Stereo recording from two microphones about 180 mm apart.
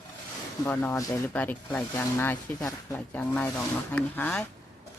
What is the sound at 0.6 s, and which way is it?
Speech, 10° left (ahead or behind).